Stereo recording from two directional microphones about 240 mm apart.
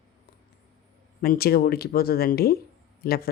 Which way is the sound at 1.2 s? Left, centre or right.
Left.